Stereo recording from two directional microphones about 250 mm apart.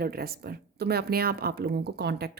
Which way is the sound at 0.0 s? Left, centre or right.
Right.